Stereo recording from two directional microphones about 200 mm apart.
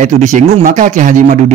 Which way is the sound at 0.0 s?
35° right (ahead or behind).